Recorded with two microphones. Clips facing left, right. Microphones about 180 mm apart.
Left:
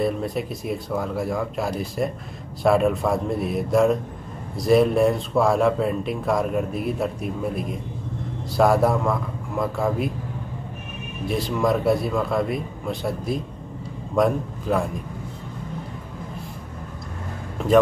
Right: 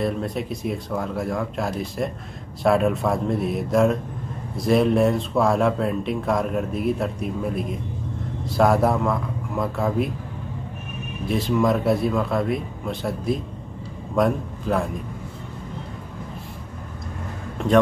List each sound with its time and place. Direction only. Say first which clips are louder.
0.0 s speech: left 1 dB; centre (ahead or behind)
11.2 s a man's voice: right 2 dB; centre (ahead or behind)
17.6 s a man's voice: left 1 dB; centre (ahead or behind)